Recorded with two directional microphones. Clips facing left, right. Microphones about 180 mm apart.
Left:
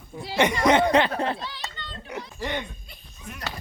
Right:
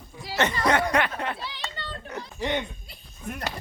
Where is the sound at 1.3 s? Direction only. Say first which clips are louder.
Even; 10° right (ahead or behind).